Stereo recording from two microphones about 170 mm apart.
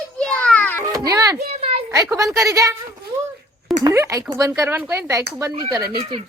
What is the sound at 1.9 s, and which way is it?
Speech, 20° right (ahead or behind).